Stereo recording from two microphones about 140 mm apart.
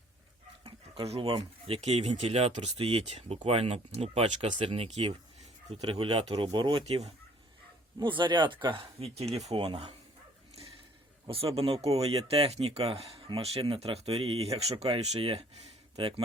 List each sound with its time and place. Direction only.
1.0 s speech: 45° right (ahead or behind)
7.9 s speech: 35° right (ahead or behind)
11.5 s speech: 45° right (ahead or behind)